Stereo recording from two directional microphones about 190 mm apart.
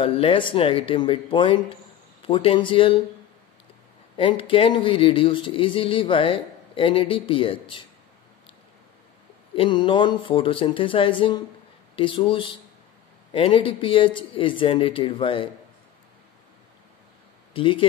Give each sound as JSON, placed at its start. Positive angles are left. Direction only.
{"t": 0.0, "sound": "speech", "side_deg": 30}
{"t": 4.2, "sound": "speech", "side_deg": 25}
{"t": 9.6, "sound": "speech", "side_deg": 25}
{"t": 17.6, "sound": "speech", "side_deg": 25}